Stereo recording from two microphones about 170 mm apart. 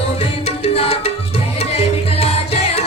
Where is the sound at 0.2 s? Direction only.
35° left (ahead or behind).